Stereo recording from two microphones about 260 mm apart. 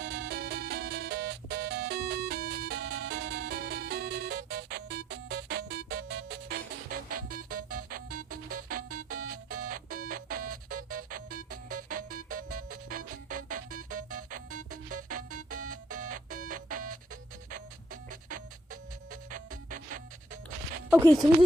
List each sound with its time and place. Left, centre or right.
0.0 s music: right
18.1 s music: right